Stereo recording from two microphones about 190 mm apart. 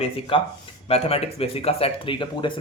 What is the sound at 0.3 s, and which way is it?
Speech, 30° left (ahead or behind).